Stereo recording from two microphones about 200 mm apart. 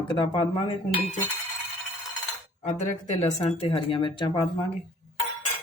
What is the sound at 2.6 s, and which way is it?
Speech, 35° left (ahead or behind).